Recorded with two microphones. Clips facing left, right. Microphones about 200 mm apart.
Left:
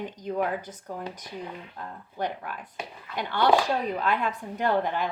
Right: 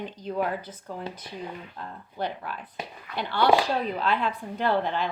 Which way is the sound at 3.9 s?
15° left (ahead or behind).